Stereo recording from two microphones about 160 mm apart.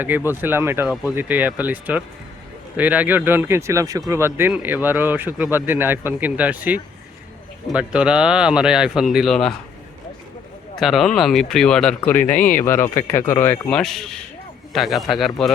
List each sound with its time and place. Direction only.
0.3 s speech: 15° right (ahead or behind)
10.8 s speech: centre (ahead or behind)
12.3 s speech: 55° left (ahead or behind)
12.6 s speech: 15° left (ahead or behind)
13.7 s speech: 5° left (ahead or behind)